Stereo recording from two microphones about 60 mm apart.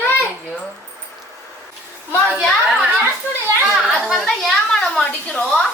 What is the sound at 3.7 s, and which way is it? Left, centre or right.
Chatter, centre.